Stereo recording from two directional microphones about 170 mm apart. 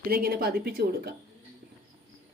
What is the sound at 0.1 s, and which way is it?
Speech, 60° right (ahead or behind).